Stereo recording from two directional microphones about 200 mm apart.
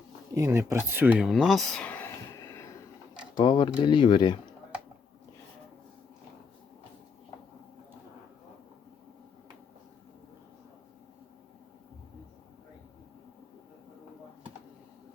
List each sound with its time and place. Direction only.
0.3 s speech: 15° right (ahead or behind); by 4.5 s 20° left (ahead or behind)